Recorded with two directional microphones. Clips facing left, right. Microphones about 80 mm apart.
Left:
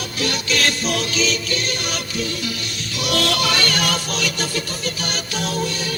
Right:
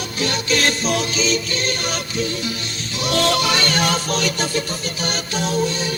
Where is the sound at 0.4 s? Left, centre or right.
Right.